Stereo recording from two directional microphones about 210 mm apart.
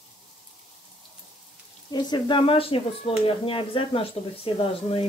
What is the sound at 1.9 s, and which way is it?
Speech, 20° left (ahead or behind).